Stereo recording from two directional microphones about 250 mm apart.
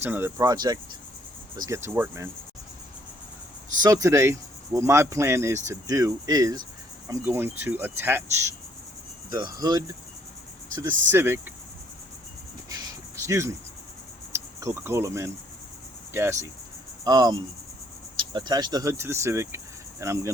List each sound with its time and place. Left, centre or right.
0.0 s speech: centre
3.8 s speech: centre
11.1 s speech: centre
13.2 s speech: centre
17.0 s cricket: centre
18.2 s speech: centre